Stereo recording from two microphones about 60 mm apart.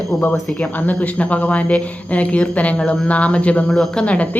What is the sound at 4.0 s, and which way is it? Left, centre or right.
Speech, left.